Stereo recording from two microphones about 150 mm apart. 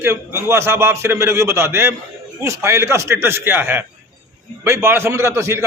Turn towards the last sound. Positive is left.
turn(degrees=-20)  # may be behind; listen again after turning